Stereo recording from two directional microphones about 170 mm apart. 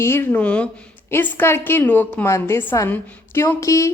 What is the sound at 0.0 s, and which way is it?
A woman's voice, 15° left (ahead or behind).